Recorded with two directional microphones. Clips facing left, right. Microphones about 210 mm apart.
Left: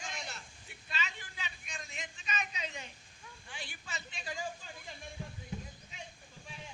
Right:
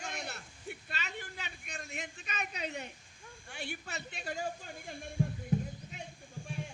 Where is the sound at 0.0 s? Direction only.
60° right (ahead or behind).